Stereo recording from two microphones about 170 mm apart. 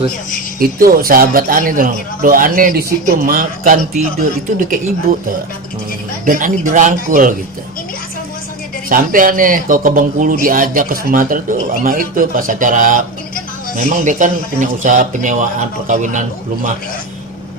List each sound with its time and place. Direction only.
0.6 s speech: 60° right (ahead or behind)
6.2 s speech: 50° right (ahead or behind)
8.9 s speech: 55° right (ahead or behind)